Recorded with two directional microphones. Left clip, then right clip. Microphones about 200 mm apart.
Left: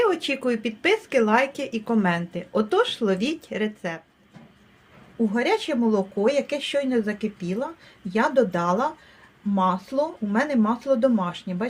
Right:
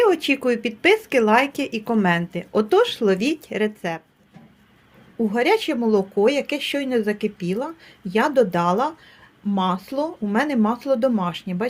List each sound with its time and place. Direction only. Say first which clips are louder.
0.0 s a woman's voice: right 4 dB; 35° right (ahead or behind)
5.3 s a woman's voice: right 4 dB; 40° right (ahead or behind)